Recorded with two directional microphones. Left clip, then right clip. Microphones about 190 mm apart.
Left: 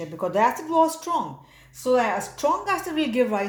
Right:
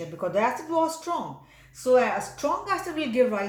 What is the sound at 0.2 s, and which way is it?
A woman's voice, 40° left (ahead or behind).